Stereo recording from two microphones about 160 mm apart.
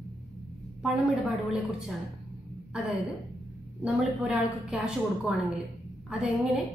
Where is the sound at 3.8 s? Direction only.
5° right (ahead or behind).